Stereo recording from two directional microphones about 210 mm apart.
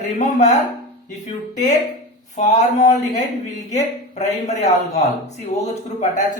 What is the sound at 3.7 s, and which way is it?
A man's voice, 35° left (ahead or behind).